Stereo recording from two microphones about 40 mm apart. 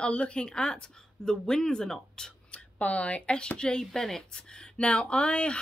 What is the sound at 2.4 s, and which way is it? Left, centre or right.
A woman's voice, left.